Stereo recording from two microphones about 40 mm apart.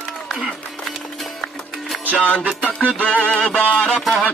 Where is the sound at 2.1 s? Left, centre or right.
Left.